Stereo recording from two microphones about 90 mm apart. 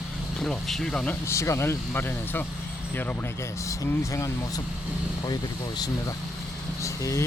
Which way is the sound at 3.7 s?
35° left (ahead or behind).